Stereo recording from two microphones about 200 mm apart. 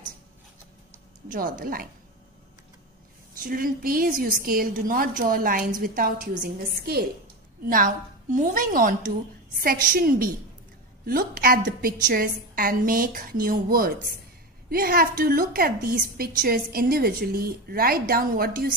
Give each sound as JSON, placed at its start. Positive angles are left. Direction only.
{"t": 1.3, "sound": "a woman's voice", "side_deg": -45}
{"t": 3.3, "sound": "a woman's voice", "side_deg": -45}